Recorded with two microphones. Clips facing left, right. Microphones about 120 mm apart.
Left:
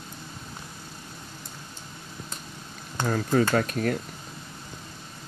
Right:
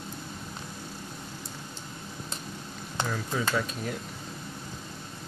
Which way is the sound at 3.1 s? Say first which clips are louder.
Left 9 dB; 55° left (ahead or behind).